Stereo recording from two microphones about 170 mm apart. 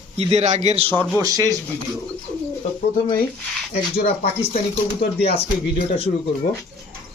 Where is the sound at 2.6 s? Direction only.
35° left (ahead or behind).